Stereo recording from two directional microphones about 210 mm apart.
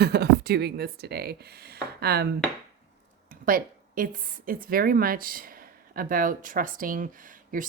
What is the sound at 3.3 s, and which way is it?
A woman's voice, 40° right (ahead or behind).